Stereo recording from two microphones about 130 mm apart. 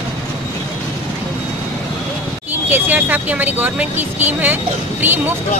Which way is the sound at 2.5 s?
15° right (ahead or behind).